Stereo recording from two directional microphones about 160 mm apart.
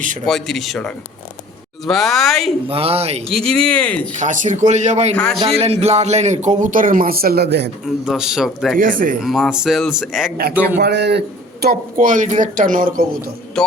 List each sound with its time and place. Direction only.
0.3 s speech: centre (ahead or behind)
2.6 s speech: 35° right (ahead or behind)
3.2 s speech: 5° left (ahead or behind)
4.2 s a man's voice: 50° right (ahead or behind)
5.1 s speech: 5° left (ahead or behind)
5.4 s a man's voice: 40° right (ahead or behind); by 7.7 s 90° right
7.9 s speech: centre (ahead or behind)
8.8 s a man's voice: 60° right (ahead or behind)
9.2 s speech: centre (ahead or behind)
10.8 s a man's voice: 90° right
11.6 s a man's voice: 65° right (ahead or behind)